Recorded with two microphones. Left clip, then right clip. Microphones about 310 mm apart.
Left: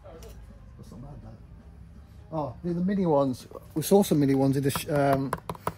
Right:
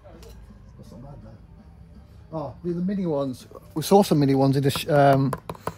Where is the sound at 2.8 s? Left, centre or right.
Centre.